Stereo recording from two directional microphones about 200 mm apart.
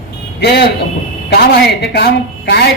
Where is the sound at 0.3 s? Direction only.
55° left (ahead or behind).